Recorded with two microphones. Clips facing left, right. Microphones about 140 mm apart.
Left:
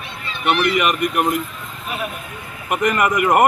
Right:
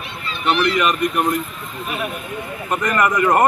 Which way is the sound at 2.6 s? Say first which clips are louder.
Left 1 dB; 15° left (ahead or behind).